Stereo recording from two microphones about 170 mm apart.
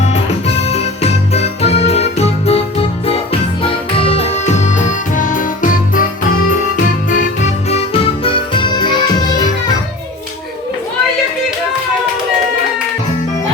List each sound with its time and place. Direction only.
0.0 s music: 40° left (ahead or behind)
7.7 s music: 35° left (ahead or behind)